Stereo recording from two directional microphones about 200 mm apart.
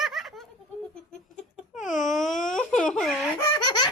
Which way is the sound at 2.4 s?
5° left (ahead or behind).